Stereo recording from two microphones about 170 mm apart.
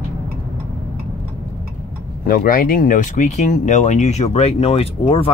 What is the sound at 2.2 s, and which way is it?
Speech, 55° left (ahead or behind).